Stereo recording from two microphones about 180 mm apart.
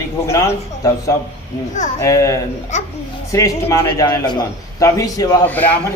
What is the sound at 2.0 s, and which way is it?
A man's voice, 20° left (ahead or behind).